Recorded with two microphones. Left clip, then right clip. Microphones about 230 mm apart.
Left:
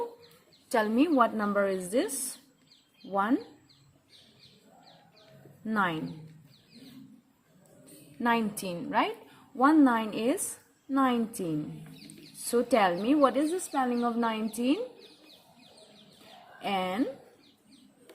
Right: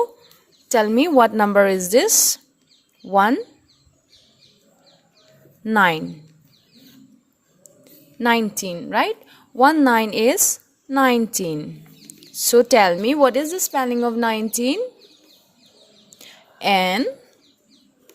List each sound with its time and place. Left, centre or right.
0.7 s a woman's voice: right
3.1 s a woman's voice: right
5.6 s a woman's voice: right
8.2 s a woman's voice: right
16.6 s a woman's voice: right